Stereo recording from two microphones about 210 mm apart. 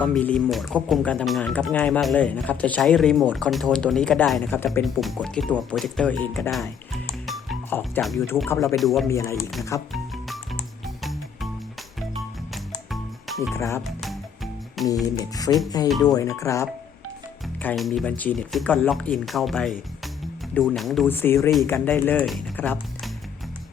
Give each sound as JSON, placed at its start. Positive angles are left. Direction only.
{"t": 0.0, "sound": "speech", "side_deg": 5}
{"t": 7.3, "sound": "music", "side_deg": 5}
{"t": 8.4, "sound": "speech", "side_deg": 15}
{"t": 8.7, "sound": "speech", "side_deg": 0}
{"t": 9.0, "sound": "speech", "side_deg": 15}
{"t": 9.9, "sound": "music", "side_deg": 0}
{"t": 12.9, "sound": "music", "side_deg": 0}
{"t": 13.5, "sound": "speech", "side_deg": 15}
{"t": 14.8, "sound": "music", "side_deg": 0}
{"t": 15.2, "sound": "speech", "side_deg": 15}
{"t": 17.6, "sound": "speech", "side_deg": 5}